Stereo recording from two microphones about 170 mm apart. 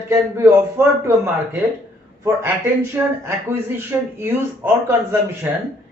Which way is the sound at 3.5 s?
15° right (ahead or behind).